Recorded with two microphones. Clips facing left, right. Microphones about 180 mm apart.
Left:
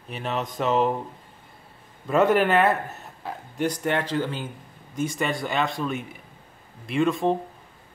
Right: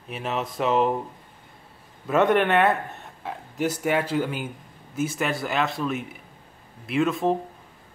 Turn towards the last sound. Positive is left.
turn(degrees=0)  # may be behind; listen again after turning